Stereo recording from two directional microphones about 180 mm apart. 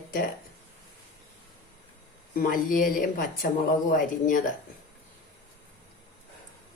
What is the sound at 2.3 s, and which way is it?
Speech, 50° left (ahead or behind).